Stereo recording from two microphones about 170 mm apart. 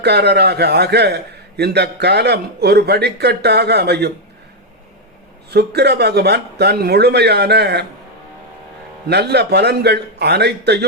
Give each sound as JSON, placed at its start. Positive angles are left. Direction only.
{"t": 0.0, "sound": "a man's voice", "side_deg": -75}
{"t": 5.5, "sound": "a man's voice", "side_deg": -75}
{"t": 9.0, "sound": "a man's voice", "side_deg": -80}